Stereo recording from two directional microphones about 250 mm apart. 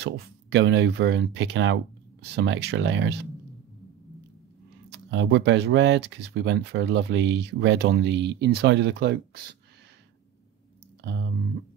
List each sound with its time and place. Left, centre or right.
0.0 s speech: right
4.8 s speech: right